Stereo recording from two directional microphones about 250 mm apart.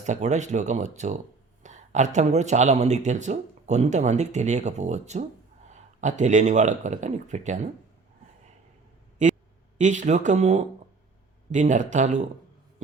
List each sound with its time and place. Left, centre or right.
0.0 s speech: right
9.2 s a sound: right
9.7 s speech: right